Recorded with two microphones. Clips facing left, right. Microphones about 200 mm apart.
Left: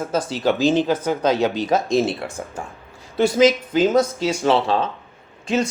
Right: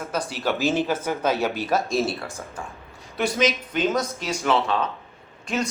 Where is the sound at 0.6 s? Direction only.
10° right (ahead or behind).